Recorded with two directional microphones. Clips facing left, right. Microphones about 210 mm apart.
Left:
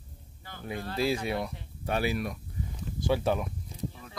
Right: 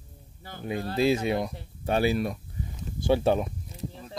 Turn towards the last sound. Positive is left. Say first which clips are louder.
# right 4 dB
turn(degrees=-25)  # may be behind; listen again after turning